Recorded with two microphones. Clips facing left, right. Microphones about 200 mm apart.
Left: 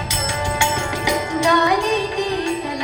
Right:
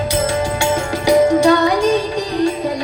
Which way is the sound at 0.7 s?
35° right (ahead or behind).